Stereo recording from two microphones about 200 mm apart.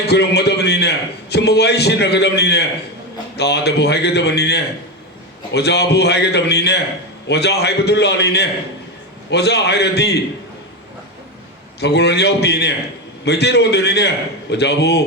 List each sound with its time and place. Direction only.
0.1 s a man's voice: 55° left (ahead or behind)
11.8 s a man's voice: 55° left (ahead or behind)